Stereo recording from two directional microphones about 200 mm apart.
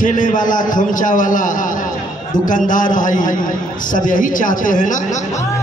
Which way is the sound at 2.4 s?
40° left (ahead or behind).